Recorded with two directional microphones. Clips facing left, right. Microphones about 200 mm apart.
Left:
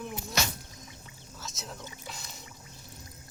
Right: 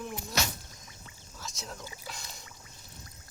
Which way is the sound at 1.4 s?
Centre (ahead or behind).